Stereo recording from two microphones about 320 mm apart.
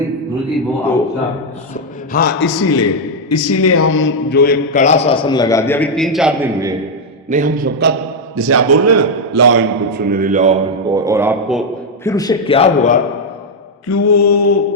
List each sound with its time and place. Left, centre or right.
1.7 s a man's voice: left
2.5 s a man's voice: left; by 6.7 s centre
7.3 s a man's voice: right
8.4 s a man's voice: right
9.9 s a man's voice: right; by 11.6 s centre
12.0 s a man's voice: centre
13.9 s mantra: left